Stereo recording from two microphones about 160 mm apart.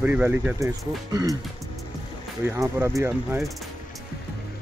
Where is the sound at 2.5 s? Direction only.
15° right (ahead or behind).